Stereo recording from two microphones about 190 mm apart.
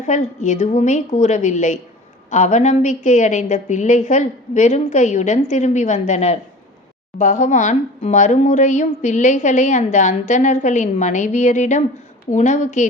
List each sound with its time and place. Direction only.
0.0 s speech: 40° left (ahead or behind)